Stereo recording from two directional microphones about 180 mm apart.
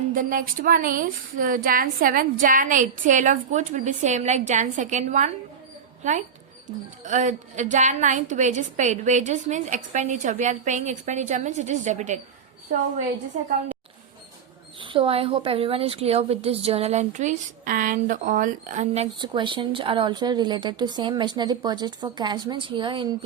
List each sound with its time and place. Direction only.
0.1 s a woman's voice: 50° right (ahead or behind)
14.8 s a woman's voice: 30° right (ahead or behind)
19.2 s a woman's voice: 25° right (ahead or behind)